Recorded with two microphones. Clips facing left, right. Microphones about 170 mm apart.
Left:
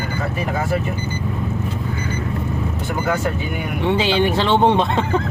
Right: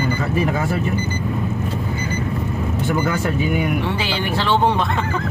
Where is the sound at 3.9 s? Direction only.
20° left (ahead or behind).